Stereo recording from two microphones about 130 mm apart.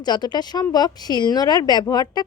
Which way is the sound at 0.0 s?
35° left (ahead or behind).